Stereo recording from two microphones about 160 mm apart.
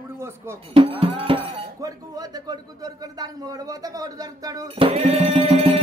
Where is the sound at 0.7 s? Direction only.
35° right (ahead or behind).